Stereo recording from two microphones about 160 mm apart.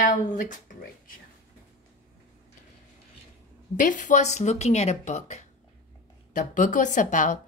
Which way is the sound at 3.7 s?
55° left (ahead or behind).